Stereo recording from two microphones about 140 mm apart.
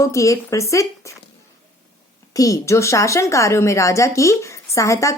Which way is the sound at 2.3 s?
25° left (ahead or behind).